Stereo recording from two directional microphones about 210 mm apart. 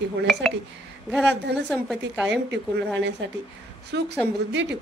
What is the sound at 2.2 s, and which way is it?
A woman's voice, 55° right (ahead or behind).